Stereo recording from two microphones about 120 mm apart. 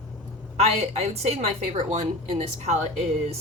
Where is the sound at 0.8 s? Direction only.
60° right (ahead or behind).